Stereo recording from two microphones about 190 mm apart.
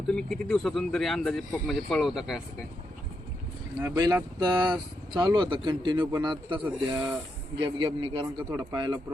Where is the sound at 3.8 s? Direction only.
15° right (ahead or behind).